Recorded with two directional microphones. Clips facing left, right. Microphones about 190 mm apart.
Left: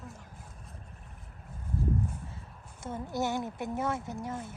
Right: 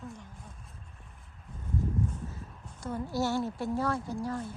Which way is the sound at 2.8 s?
25° left (ahead or behind).